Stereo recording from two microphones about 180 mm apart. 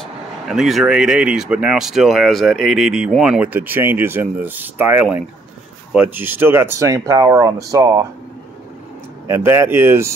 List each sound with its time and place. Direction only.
0.5 s speech: centre (ahead or behind); by 8.1 s 15° right (ahead or behind)
9.3 s speech: 15° right (ahead or behind)